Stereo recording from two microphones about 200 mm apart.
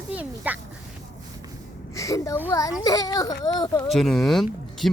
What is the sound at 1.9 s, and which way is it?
A child's voice, 15° left (ahead or behind).